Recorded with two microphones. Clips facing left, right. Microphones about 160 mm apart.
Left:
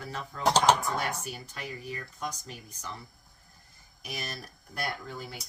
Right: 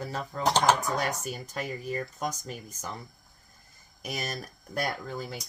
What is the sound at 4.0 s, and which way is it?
Speech, 45° right (ahead or behind).